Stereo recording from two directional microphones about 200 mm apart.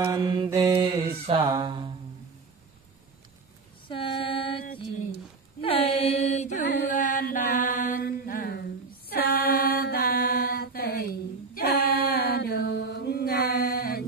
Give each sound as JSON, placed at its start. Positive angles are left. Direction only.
{"t": 0.0, "sound": "mantra", "side_deg": -20}
{"t": 3.9, "sound": "female singing", "side_deg": 25}
{"t": 5.6, "sound": "a sound", "side_deg": 30}
{"t": 6.7, "sound": "mantra", "side_deg": 50}